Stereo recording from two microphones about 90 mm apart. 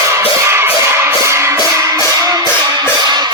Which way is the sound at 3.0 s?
50° right (ahead or behind).